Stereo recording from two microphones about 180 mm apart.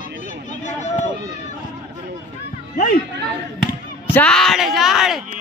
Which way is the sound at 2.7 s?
50° left (ahead or behind).